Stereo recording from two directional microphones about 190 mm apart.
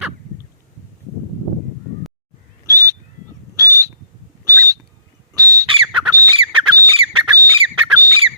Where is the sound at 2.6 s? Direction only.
20° right (ahead or behind).